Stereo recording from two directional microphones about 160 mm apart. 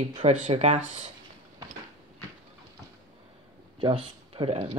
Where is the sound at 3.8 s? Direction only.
35° right (ahead or behind).